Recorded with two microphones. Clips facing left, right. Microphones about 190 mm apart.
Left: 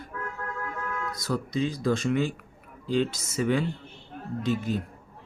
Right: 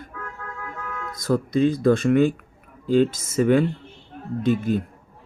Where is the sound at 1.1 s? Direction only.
50° right (ahead or behind).